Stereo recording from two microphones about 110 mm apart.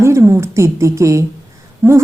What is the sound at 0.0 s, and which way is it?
A woman's voice, 25° right (ahead or behind).